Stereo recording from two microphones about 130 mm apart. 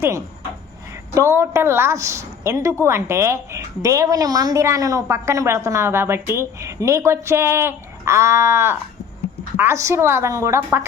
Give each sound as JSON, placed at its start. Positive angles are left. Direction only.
{"t": 1.1, "sound": "a woman's voice", "side_deg": -20}